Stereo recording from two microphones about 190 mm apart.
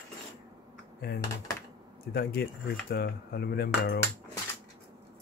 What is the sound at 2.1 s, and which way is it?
Cutlery, 55° left (ahead or behind).